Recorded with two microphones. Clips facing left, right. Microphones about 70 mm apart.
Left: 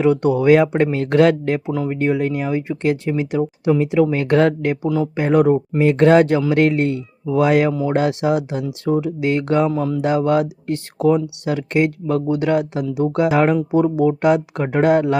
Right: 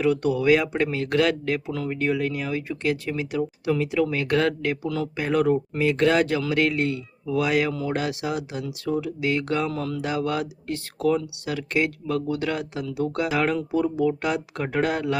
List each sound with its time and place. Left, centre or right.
0.0 s speech: left